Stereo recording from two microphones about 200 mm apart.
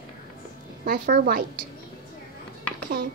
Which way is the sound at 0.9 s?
50° right (ahead or behind).